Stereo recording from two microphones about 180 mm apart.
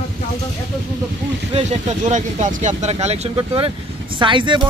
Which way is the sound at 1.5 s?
35° right (ahead or behind).